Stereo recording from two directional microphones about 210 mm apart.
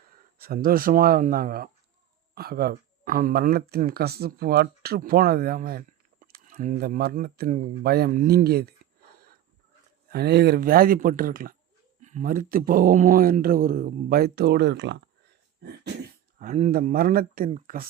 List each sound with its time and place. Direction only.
0.3 s speech: 45° right (ahead or behind)
10.1 s speech: 50° right (ahead or behind)
16.4 s speech: 35° right (ahead or behind)
16.7 s speech: 45° right (ahead or behind)